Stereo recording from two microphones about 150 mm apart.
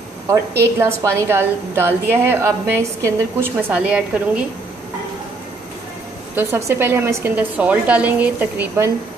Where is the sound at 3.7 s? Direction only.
5° right (ahead or behind).